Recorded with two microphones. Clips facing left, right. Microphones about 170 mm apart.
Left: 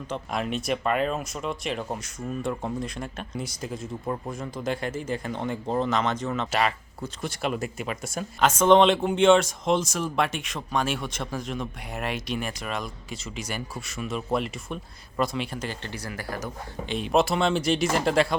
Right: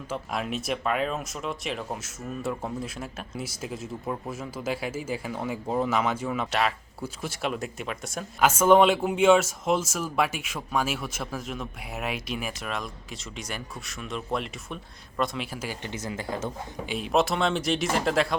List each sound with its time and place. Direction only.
0.1 s speech: centre (ahead or behind)
15.9 s speech: 20° right (ahead or behind)
16.9 s speech: centre (ahead or behind)